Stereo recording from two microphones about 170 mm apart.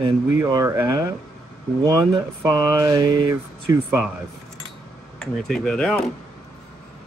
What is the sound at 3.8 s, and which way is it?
Speech, 10° right (ahead or behind).